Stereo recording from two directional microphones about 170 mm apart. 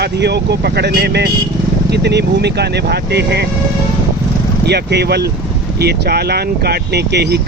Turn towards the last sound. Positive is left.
turn(degrees=-75)  # may be behind; listen again after turning